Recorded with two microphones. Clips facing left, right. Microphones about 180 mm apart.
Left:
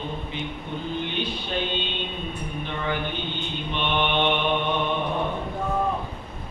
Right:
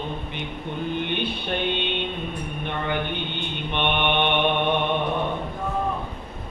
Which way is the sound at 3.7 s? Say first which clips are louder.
Right 2 dB; 60° right (ahead or behind).